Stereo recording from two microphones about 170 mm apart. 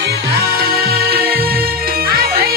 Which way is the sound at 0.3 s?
70° right (ahead or behind).